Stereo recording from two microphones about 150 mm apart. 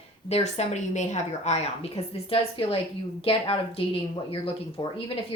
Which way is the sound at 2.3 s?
35° left (ahead or behind).